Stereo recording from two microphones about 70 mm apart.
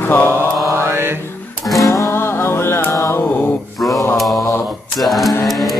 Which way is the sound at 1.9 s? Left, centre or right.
Left.